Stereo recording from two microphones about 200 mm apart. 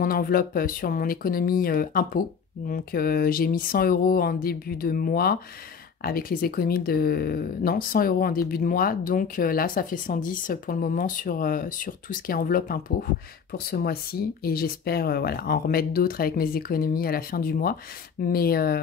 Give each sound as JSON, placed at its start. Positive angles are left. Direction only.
{"t": 0.0, "sound": "speech", "side_deg": 45}